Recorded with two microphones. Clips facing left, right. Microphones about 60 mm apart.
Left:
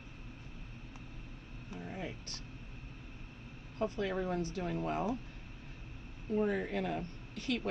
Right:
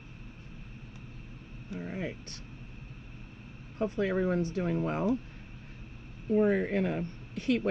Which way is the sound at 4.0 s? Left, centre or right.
Right.